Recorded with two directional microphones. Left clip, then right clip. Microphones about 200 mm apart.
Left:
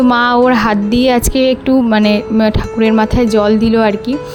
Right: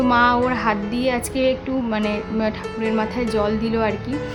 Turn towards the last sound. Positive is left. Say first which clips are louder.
# left 10 dB
turn(degrees=40)  # may be behind; listen again after turning